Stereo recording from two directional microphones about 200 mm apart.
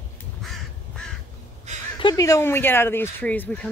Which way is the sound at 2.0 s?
20° left (ahead or behind).